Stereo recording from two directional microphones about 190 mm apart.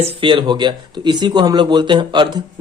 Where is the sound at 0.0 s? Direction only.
25° right (ahead or behind).